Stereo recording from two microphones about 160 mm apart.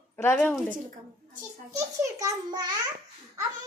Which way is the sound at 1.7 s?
20° right (ahead or behind).